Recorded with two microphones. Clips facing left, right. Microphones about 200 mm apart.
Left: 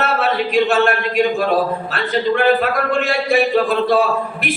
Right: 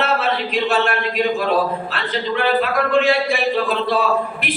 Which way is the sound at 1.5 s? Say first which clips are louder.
Left 1 dB; 45° left (ahead or behind).